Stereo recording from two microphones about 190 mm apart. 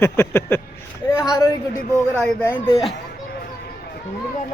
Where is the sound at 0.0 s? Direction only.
10° left (ahead or behind).